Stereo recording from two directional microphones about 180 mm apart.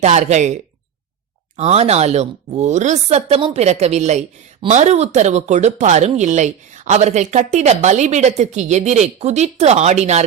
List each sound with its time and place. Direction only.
0.0 s speech: 40° right (ahead or behind)